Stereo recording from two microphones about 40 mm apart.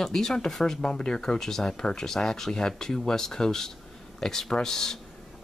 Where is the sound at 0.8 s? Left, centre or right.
Left.